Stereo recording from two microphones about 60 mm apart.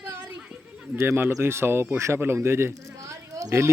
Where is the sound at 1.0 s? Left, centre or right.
Right.